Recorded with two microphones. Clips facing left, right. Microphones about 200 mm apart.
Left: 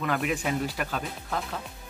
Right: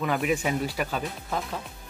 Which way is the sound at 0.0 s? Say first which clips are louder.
Right 2 dB; centre (ahead or behind).